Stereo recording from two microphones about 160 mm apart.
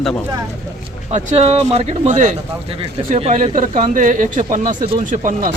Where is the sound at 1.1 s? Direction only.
40° right (ahead or behind).